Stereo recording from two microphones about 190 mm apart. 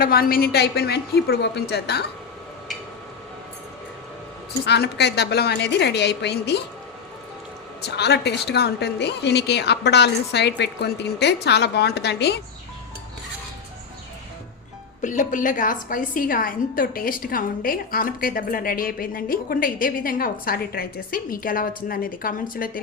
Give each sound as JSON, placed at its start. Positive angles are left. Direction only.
{"t": 0.0, "sound": "a woman's voice", "side_deg": 50}
{"t": 4.6, "sound": "a woman's voice", "side_deg": 60}
{"t": 7.9, "sound": "a woman's voice", "side_deg": 60}
{"t": 15.0, "sound": "a woman's voice", "side_deg": 40}